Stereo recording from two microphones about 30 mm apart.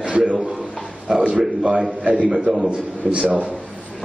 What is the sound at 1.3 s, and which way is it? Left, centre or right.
A man's voice, right.